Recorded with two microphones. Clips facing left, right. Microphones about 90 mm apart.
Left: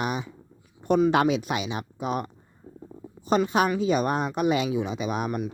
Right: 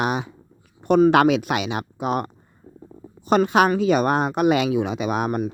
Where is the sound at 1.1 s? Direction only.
75° right (ahead or behind).